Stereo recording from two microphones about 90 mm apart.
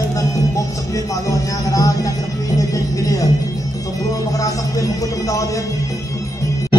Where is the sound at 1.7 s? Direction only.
40° left (ahead or behind).